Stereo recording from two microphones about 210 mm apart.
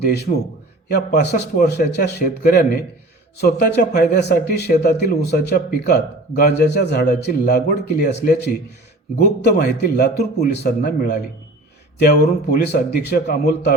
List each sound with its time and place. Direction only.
0.0 s a man's voice: 50° left (ahead or behind)